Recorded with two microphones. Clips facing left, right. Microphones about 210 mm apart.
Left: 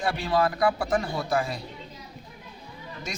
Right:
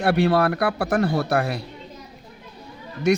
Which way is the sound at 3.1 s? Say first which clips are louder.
Right 19 dB; 65° right (ahead or behind).